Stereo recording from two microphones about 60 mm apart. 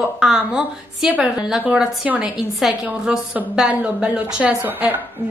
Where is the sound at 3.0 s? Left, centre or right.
Centre.